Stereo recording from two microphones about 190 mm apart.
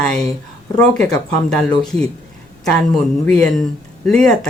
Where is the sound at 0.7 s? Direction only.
15° left (ahead or behind).